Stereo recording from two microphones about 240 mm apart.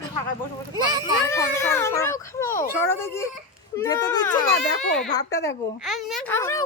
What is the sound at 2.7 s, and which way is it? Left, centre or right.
A child's voice, centre.